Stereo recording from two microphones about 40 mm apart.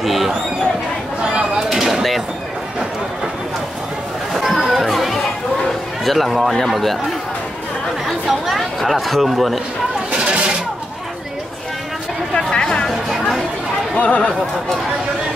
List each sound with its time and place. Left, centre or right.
0.0 s speech: centre
1.2 s speech: right
1.6 s speech: centre
4.3 s chatter: centre
6.0 s a man's voice: centre
8.3 s speech: centre
10.1 s a sound: right
12.4 s chatter: left
13.1 s a sound: centre
13.9 s speech: left